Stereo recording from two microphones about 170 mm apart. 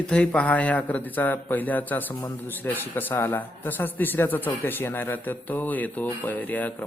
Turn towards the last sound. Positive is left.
turn(degrees=10)  # may be behind; listen again after turning